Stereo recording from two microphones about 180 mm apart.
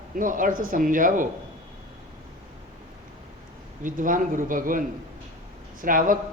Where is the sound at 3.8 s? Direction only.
50° right (ahead or behind).